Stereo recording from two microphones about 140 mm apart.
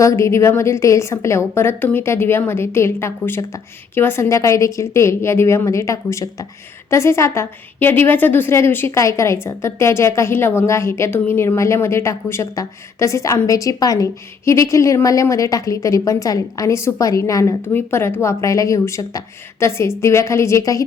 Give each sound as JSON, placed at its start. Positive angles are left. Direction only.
{"t": 0.0, "sound": "a woman's voice", "side_deg": 20}